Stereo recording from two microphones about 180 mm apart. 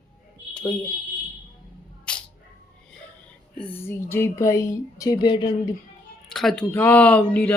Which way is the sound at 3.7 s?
15° left (ahead or behind).